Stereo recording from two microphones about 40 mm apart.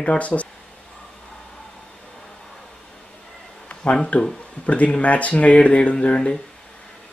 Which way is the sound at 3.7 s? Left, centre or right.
Left.